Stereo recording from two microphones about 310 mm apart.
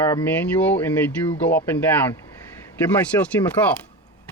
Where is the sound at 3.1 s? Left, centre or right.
Centre.